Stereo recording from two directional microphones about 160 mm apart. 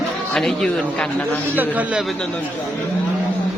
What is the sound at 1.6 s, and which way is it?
Speech, 10° right (ahead or behind).